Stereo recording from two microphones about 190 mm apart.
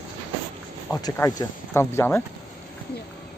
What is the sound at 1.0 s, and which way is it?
Speech, 15° left (ahead or behind).